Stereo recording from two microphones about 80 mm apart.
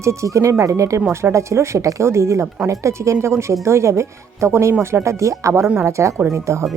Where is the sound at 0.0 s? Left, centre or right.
Right.